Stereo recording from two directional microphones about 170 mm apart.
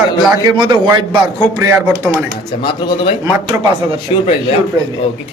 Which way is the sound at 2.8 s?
25° left (ahead or behind).